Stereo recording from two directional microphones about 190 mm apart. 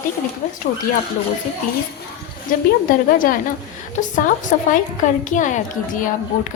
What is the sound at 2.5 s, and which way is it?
A woman's voice, 45° left (ahead or behind).